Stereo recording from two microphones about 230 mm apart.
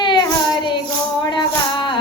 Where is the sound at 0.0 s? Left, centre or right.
Centre.